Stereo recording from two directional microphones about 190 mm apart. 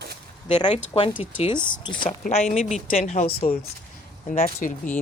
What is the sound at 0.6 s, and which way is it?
Speech, 30° left (ahead or behind).